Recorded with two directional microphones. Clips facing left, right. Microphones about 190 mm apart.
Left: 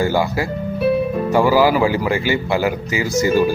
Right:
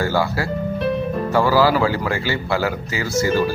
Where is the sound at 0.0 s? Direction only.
15° left (ahead or behind).